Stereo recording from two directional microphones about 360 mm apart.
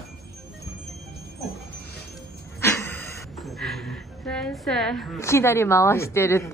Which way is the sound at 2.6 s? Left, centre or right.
Centre.